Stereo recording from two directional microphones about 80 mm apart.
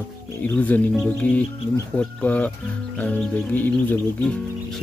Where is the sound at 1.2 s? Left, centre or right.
Centre.